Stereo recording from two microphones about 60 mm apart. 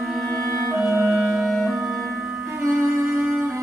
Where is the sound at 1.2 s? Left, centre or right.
Centre.